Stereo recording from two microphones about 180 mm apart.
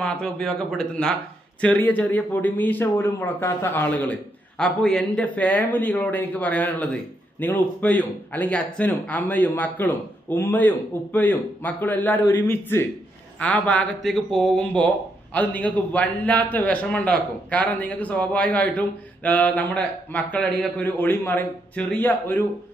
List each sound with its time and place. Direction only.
0.0 s a man's voice: 5° left (ahead or behind)